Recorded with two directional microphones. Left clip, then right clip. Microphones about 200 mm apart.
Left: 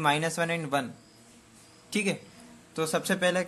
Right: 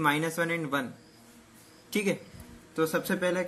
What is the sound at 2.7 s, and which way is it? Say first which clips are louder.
Speech: even; 45° left (ahead or behind).